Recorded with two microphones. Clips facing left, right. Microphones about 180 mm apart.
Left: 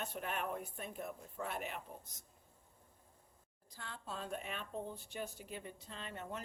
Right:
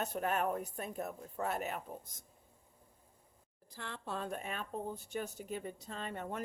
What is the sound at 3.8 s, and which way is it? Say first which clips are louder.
Speech: right 5 dB; 70° right (ahead or behind).